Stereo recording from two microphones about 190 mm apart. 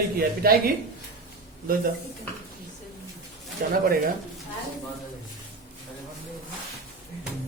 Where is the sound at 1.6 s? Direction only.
50° right (ahead or behind).